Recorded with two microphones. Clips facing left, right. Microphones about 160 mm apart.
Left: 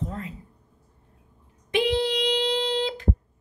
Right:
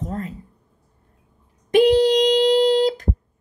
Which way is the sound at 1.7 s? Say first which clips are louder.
Right 9 dB; 40° right (ahead or behind).